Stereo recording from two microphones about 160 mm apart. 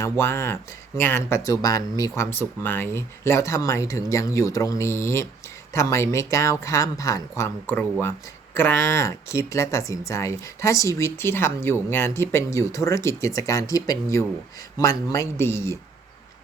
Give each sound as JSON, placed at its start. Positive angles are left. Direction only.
{"t": 0.0, "sound": "speech", "side_deg": 15}